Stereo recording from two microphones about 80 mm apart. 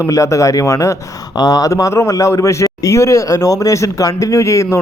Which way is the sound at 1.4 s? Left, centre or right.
Left.